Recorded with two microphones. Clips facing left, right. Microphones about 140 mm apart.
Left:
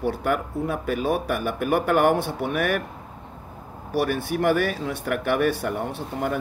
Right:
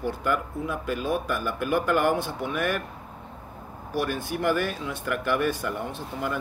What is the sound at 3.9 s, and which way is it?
Speech, 60° left (ahead or behind).